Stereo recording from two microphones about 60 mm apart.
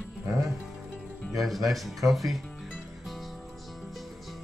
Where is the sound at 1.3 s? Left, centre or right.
Centre.